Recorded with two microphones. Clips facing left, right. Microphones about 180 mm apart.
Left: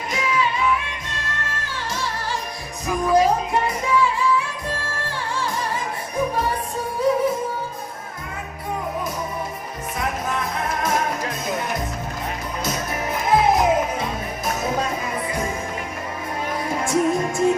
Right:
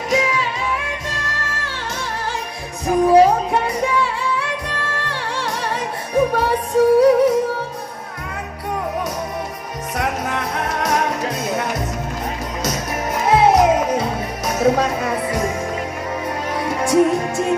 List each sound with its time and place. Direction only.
0.1 s music: 75° right (ahead or behind)
2.8 s music: 30° right (ahead or behind)
3.5 s music: 65° right (ahead or behind)
9.9 s music: 70° right (ahead or behind)
13.2 s music: 70° right (ahead or behind)
16.6 s music: 70° right (ahead or behind)